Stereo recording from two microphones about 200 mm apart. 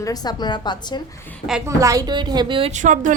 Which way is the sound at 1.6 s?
15° right (ahead or behind).